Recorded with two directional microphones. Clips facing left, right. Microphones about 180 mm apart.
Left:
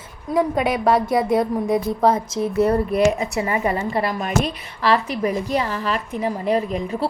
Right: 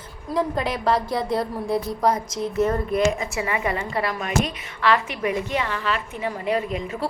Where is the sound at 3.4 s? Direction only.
40° left (ahead or behind).